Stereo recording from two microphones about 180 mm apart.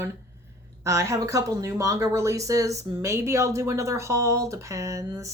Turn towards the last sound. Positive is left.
turn(degrees=-15)  # may be behind; listen again after turning